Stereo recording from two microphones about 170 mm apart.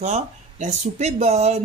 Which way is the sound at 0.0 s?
45° right (ahead or behind).